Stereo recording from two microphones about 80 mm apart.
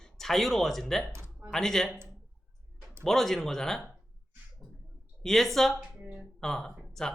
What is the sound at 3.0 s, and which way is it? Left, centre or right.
Speech, centre.